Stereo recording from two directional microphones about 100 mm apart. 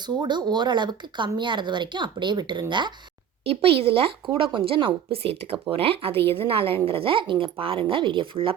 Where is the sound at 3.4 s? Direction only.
70° right (ahead or behind).